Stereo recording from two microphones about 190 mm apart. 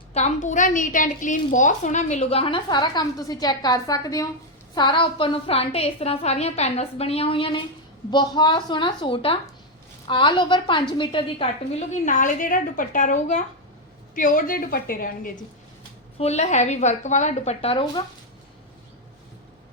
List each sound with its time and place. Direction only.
0.1 s a woman's voice: 35° left (ahead or behind)
16.1 s a woman's voice: 35° left (ahead or behind)